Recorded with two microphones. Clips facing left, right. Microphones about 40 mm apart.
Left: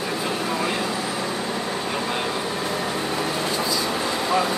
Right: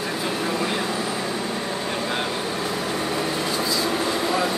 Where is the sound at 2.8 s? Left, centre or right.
Centre.